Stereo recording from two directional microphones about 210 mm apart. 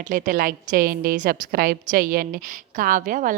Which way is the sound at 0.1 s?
40° right (ahead or behind).